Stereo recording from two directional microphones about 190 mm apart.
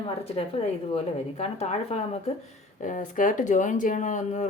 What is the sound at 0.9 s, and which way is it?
Speech, 35° left (ahead or behind).